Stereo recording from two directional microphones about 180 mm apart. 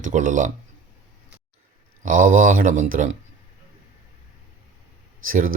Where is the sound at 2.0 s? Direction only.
45° right (ahead or behind).